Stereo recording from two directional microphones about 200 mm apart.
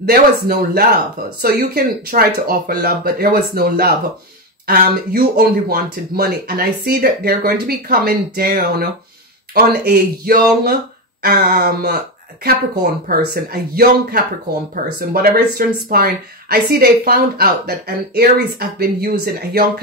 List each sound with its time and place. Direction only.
0.0 s a woman's voice: 50° right (ahead or behind)